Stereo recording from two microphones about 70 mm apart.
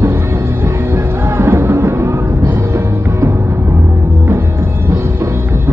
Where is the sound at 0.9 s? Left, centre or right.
Right.